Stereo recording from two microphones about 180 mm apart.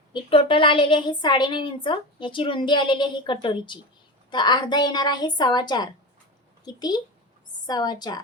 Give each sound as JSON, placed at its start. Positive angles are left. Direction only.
{"t": 0.1, "sound": "a woman's voice", "side_deg": 30}